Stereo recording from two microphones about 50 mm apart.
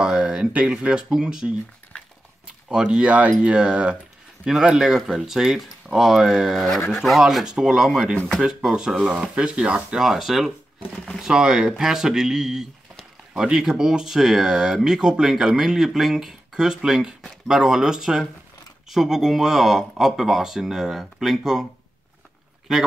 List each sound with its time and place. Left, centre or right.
0.0 s speech: centre
4.5 s speech: centre
9.9 s speech: centre